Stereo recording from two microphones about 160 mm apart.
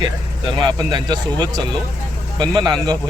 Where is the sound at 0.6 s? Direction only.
25° right (ahead or behind).